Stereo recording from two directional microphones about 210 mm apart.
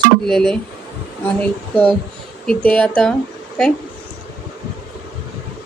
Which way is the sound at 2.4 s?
5° left (ahead or behind).